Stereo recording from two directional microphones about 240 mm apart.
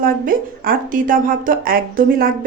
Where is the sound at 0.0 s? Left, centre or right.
Right.